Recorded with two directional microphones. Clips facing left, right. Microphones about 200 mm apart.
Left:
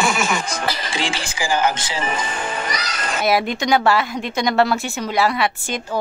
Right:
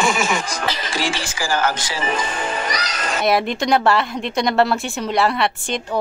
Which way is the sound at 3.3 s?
Centre (ahead or behind).